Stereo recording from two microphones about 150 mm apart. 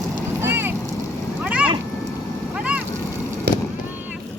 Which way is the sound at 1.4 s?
5° right (ahead or behind).